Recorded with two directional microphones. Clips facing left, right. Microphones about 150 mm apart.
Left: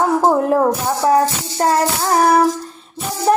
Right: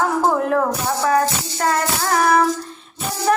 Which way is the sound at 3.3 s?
30° left (ahead or behind).